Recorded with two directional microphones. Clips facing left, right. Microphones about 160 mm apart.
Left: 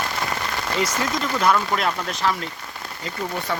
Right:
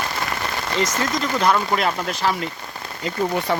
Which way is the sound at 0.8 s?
10° left (ahead or behind).